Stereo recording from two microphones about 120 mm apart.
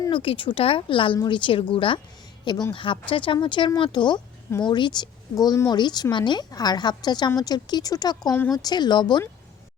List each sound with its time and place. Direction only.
0.1 s a woman's voice: 45° left (ahead or behind)